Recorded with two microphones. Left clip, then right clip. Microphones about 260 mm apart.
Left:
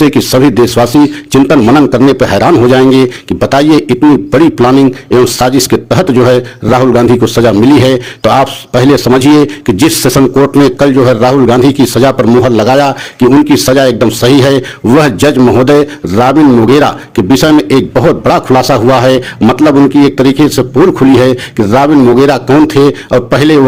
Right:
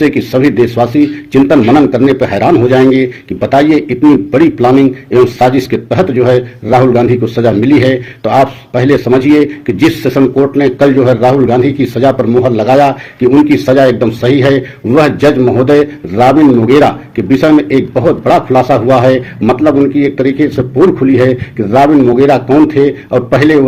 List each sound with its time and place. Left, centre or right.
0.0 s a man's voice: left